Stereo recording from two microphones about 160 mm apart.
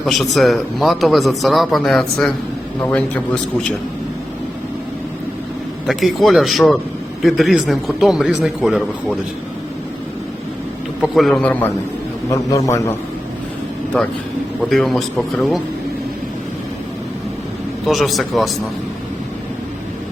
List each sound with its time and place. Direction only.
0.0 s a man's voice: centre (ahead or behind)
5.9 s a man's voice: centre (ahead or behind)
11.0 s a man's voice: centre (ahead or behind)
12.3 s a man's voice: 20° left (ahead or behind)
14.7 s a man's voice: centre (ahead or behind)
17.8 s a man's voice: centre (ahead or behind)